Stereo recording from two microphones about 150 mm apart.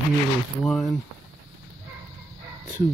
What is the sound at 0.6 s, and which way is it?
Speech, centre (ahead or behind).